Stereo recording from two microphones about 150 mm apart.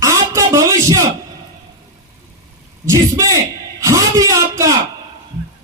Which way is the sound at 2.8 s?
25° right (ahead or behind).